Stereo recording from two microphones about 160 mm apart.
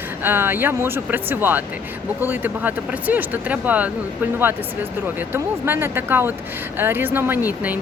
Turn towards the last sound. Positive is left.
turn(degrees=-10)  # may be behind; listen again after turning